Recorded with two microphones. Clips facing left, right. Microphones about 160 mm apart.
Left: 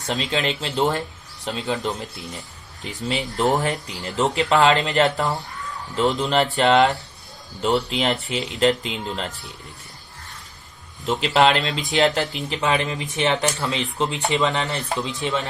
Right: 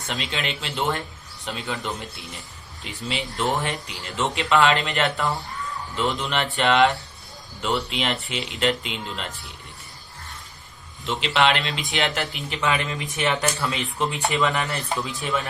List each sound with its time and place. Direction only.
0.1 s speech: 35° left (ahead or behind)
3.3 s speech: 40° left (ahead or behind)
11.0 s speech: 40° left (ahead or behind); by 15.4 s 25° left (ahead or behind)